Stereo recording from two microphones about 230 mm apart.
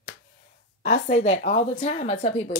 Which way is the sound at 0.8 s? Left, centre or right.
Left.